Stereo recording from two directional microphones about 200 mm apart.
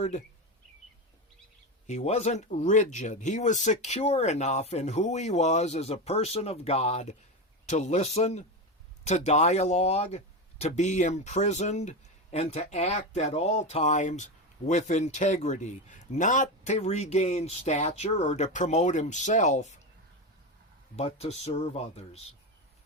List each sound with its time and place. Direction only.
1.9 s speech: 35° left (ahead or behind)
20.9 s speech: 30° left (ahead or behind)